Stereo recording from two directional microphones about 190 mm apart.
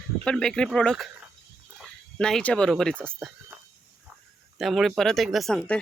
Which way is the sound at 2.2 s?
5° left (ahead or behind).